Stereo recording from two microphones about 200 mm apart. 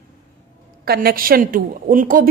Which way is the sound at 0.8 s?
50° right (ahead or behind).